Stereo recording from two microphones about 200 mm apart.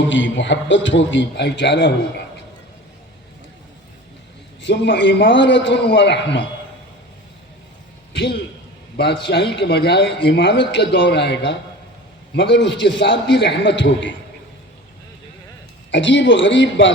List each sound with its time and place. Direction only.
0.0 s a man's voice: 65° left (ahead or behind)
4.6 s a man's voice: 60° left (ahead or behind)
8.1 s a man's voice: 60° left (ahead or behind)
15.9 s a man's voice: 65° left (ahead or behind)